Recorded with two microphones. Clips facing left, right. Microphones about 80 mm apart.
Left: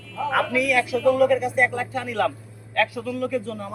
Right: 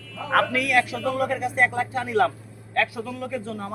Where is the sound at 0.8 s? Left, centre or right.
Right.